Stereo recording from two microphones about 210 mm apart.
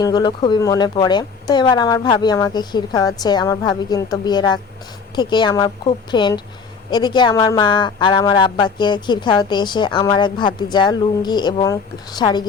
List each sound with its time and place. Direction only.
0.0 s speech: 20° left (ahead or behind)